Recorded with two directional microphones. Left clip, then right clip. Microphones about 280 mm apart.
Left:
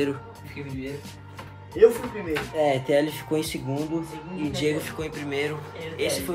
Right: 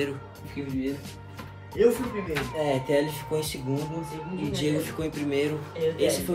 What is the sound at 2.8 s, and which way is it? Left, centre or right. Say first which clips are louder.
Speech: left 3 dB; left.